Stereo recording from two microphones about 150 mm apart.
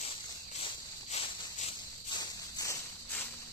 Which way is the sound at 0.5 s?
40° left (ahead or behind).